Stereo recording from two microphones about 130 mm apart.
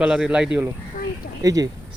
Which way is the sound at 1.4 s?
25° right (ahead or behind).